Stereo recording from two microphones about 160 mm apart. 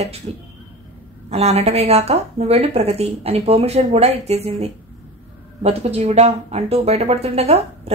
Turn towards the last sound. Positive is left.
turn(degrees=-40)  # may be behind; listen again after turning